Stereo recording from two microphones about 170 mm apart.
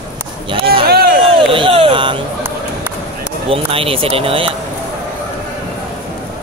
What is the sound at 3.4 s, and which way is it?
Speech, 35° right (ahead or behind).